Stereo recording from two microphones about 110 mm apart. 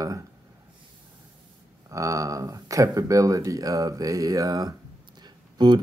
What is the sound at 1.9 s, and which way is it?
Speech, 30° right (ahead or behind).